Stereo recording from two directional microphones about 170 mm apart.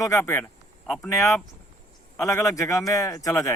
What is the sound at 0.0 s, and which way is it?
A man's voice, 15° left (ahead or behind).